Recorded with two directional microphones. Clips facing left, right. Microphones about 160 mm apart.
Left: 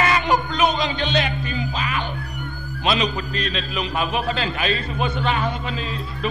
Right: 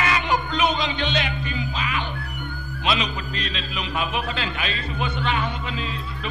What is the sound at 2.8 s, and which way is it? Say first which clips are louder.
A man's voice: left 3 dB; 40° left (ahead or behind).